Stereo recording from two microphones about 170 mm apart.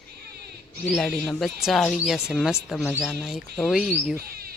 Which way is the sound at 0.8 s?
5° left (ahead or behind).